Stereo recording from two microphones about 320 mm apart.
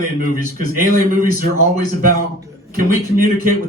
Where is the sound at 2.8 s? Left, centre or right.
Right.